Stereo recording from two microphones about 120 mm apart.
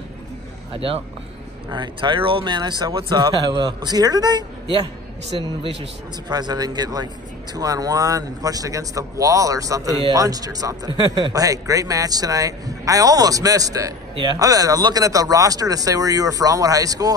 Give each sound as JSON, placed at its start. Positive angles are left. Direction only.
{"t": 0.7, "sound": "speech", "side_deg": -50}
{"t": 1.7, "sound": "speech", "side_deg": -40}
{"t": 6.2, "sound": "speech", "side_deg": -35}